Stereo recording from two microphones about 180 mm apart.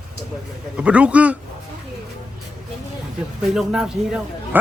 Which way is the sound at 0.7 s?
5° right (ahead or behind).